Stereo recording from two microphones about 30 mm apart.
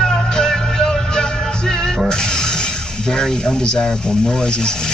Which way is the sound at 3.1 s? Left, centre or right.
Left.